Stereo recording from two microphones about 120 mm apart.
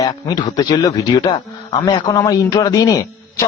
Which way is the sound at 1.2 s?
45° left (ahead or behind).